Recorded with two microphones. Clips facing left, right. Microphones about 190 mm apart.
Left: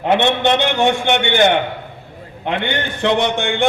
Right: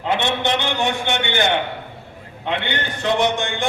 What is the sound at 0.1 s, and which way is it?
A man's voice, 60° left (ahead or behind).